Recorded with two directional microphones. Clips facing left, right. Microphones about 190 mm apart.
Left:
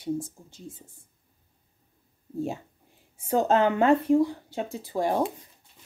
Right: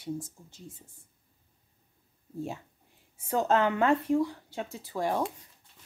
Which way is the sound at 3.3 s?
25° left (ahead or behind).